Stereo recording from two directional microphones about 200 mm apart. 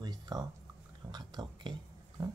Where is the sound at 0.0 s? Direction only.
20° right (ahead or behind).